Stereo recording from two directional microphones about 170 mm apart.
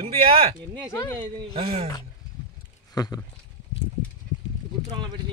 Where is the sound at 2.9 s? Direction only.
20° left (ahead or behind).